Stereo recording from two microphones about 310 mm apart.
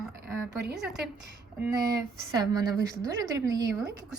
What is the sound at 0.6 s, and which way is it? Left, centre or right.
Speech, right.